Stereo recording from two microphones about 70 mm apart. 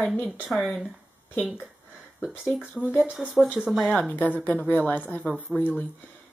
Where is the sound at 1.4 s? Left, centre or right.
Centre.